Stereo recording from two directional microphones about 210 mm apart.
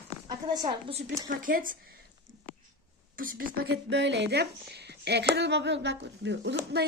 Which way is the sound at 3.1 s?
40° right (ahead or behind).